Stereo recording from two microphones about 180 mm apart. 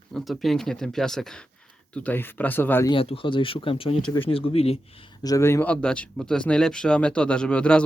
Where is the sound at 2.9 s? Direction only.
30° left (ahead or behind).